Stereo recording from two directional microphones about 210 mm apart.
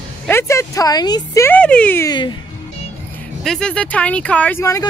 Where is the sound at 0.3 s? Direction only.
10° left (ahead or behind).